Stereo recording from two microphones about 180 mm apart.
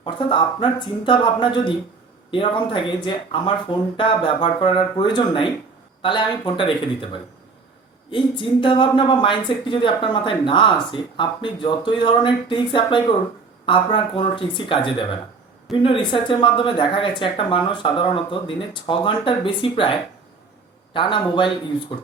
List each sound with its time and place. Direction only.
0.0 s speech: 30° left (ahead or behind)